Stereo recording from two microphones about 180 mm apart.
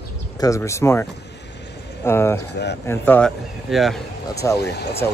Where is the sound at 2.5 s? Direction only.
70° left (ahead or behind).